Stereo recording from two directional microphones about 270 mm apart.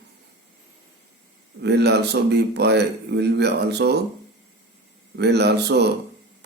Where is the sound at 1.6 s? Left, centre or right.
Right.